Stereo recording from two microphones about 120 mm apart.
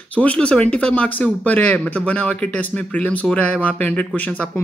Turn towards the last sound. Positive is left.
turn(degrees=10)  # may be behind; listen again after turning